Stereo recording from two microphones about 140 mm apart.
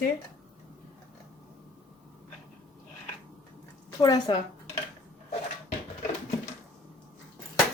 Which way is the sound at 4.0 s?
30° left (ahead or behind).